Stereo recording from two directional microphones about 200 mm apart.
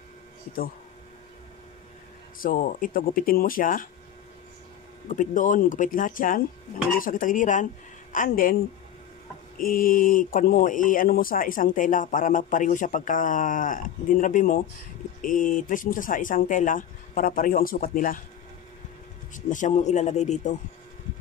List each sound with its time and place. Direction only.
2.3 s speech: 45° left (ahead or behind)
5.0 s speech: 40° left (ahead or behind)
9.6 s speech: 45° left (ahead or behind)
19.3 s speech: 40° left (ahead or behind)